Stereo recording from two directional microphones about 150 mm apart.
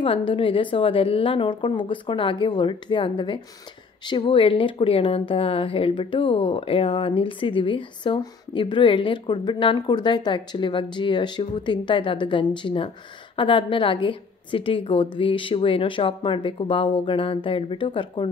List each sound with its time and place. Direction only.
0.0 s speech: 35° left (ahead or behind)